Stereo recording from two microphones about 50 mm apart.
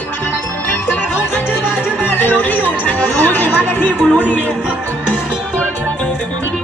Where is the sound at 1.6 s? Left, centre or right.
Left.